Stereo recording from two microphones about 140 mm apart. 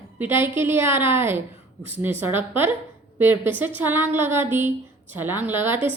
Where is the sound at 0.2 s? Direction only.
15° right (ahead or behind).